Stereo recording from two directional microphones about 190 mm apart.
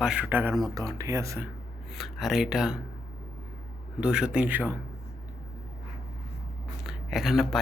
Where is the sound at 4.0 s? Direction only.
5° right (ahead or behind).